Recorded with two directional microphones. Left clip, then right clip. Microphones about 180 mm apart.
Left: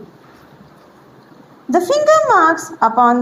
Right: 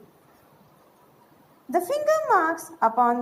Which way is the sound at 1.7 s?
45° right (ahead or behind).